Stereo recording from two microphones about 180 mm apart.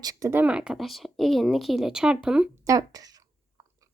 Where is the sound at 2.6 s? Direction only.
20° right (ahead or behind).